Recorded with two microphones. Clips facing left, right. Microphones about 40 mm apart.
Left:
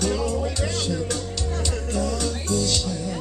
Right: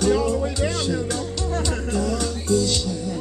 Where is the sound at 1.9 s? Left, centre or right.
Centre.